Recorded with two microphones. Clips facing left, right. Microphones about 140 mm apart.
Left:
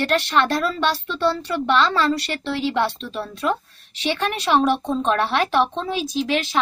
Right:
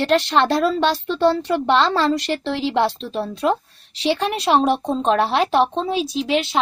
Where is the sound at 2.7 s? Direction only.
25° right (ahead or behind).